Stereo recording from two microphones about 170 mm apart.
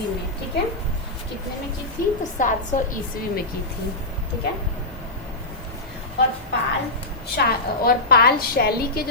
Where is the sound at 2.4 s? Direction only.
50° left (ahead or behind).